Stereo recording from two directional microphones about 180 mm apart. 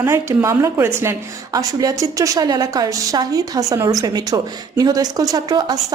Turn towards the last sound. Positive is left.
turn(degrees=-20)  # may be behind; listen again after turning